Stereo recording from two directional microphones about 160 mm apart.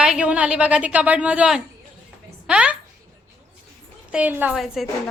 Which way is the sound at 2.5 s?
5° right (ahead or behind).